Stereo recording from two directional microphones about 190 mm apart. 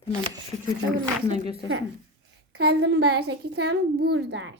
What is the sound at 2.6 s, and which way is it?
A woman's voice, 60° right (ahead or behind).